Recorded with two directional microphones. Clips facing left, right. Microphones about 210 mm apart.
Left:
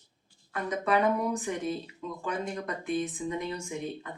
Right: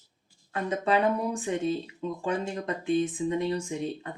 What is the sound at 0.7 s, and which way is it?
Speech, 30° right (ahead or behind).